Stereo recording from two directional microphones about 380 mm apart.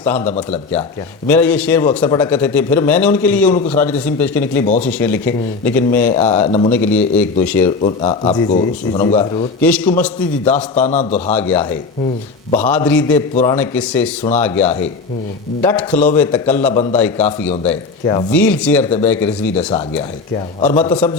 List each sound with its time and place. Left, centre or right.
0.0 s speech: centre
4.6 s speech: centre
4.9 s speech: centre
6.1 s speech: centre
7.8 s speech: centre
10.8 s speech: centre
11.3 s speech: centre
20.7 s speech: centre